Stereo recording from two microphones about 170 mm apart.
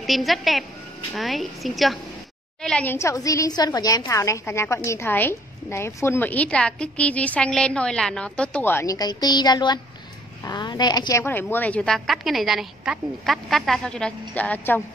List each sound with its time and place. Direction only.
0.0 s a woman's voice: centre (ahead or behind)